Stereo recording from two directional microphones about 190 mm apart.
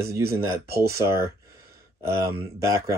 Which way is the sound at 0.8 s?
15° right (ahead or behind).